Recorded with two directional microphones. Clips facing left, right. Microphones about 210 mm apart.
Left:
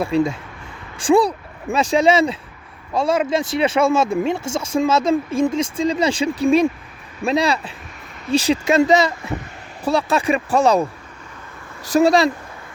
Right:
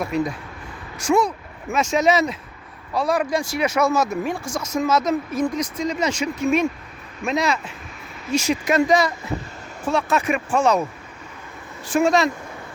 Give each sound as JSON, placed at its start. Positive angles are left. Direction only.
{"t": 0.0, "sound": "speech", "side_deg": 30}
{"t": 11.9, "sound": "speech", "side_deg": 35}